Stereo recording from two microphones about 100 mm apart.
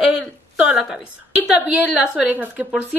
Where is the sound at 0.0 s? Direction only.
5° right (ahead or behind).